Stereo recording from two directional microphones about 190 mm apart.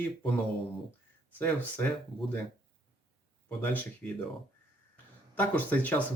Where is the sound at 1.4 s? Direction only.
10° left (ahead or behind).